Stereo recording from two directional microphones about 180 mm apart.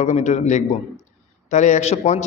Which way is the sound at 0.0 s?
40° left (ahead or behind).